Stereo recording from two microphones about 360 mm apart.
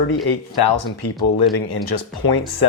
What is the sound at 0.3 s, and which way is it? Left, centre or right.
Speech, left.